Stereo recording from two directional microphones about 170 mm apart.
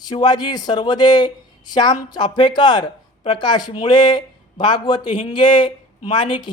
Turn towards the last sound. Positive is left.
turn(degrees=25)  # may be behind; listen again after turning